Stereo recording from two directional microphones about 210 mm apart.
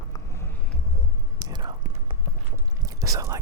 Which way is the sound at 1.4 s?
20° right (ahead or behind).